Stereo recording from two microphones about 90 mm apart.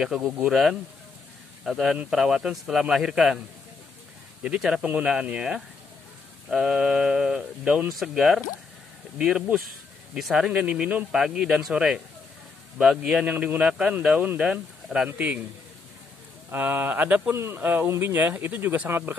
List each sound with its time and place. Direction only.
0.0 s speech: 10° right (ahead or behind)
4.4 s speech: 10° right (ahead or behind)
16.4 s speech: 20° right (ahead or behind)
17.4 s speech: 30° right (ahead or behind)